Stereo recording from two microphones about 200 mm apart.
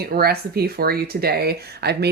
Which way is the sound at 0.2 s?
50° right (ahead or behind).